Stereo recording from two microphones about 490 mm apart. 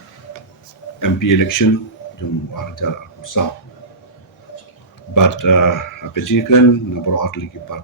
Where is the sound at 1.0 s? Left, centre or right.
Left.